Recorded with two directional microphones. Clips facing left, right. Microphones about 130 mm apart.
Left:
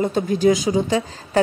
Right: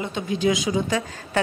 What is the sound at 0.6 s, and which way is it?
Speech, 30° left (ahead or behind).